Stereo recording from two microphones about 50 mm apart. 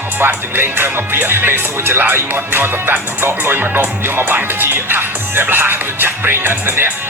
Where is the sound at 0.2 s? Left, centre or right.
Right.